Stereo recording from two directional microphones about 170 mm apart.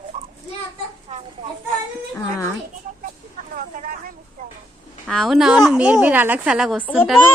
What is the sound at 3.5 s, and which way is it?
Vehicle, 50° right (ahead or behind).